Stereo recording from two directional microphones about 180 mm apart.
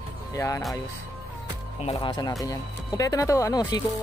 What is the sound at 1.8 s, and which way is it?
Speech, 30° left (ahead or behind).